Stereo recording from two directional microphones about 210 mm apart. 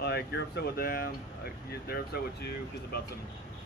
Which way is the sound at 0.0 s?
50° left (ahead or behind).